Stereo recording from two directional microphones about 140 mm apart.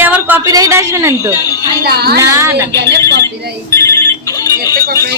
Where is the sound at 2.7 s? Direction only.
20° left (ahead or behind).